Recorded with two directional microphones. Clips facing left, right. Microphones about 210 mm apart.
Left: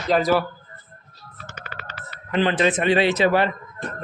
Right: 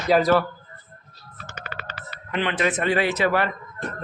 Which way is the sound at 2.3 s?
30° left (ahead or behind).